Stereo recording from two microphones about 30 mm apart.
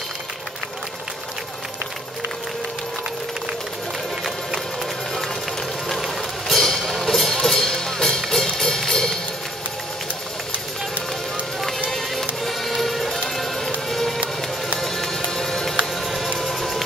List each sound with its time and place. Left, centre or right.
5.9 s music: centre
6.7 s music: centre
11.9 s music: centre
15.8 s music: centre
16.3 s a sound: centre